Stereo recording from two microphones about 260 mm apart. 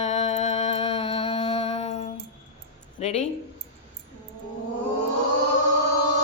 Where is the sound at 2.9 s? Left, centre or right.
Left.